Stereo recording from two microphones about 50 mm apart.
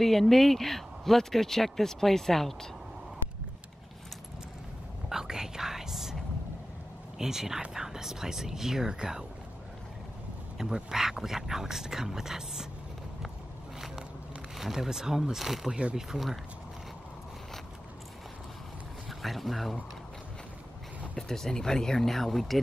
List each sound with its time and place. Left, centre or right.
0.0 s speech: centre
5.1 s whispering: centre
7.2 s speech: centre
10.6 s speech: centre
13.7 s walk: centre
14.6 s speech: centre
15.7 s speech: right
16.1 s speech: centre
19.0 s speech: centre
21.2 s speech: centre